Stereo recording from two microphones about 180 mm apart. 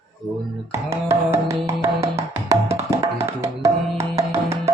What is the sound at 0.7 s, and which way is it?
Music, 15° right (ahead or behind).